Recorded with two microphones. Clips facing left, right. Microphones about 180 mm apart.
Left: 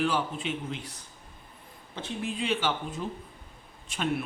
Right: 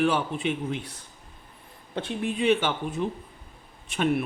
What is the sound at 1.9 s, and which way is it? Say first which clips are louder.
Speech: right 5 dB; 60° right (ahead or behind).